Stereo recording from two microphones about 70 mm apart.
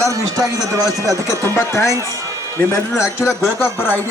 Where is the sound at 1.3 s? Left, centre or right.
Left.